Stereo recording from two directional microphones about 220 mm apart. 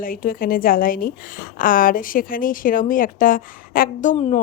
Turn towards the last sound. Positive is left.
turn(degrees=35)  # may be behind; listen again after turning